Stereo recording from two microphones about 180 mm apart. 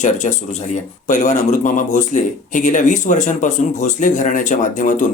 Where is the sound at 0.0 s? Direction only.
40° left (ahead or behind).